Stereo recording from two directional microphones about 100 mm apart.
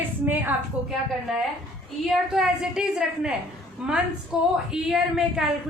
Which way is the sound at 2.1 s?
5° right (ahead or behind).